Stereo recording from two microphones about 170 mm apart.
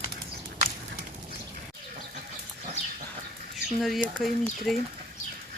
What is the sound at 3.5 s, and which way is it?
Speech, centre (ahead or behind).